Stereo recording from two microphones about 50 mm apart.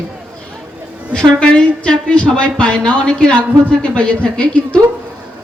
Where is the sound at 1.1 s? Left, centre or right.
Centre.